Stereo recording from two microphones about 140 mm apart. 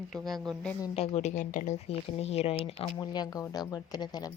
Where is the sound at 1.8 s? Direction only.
45° left (ahead or behind).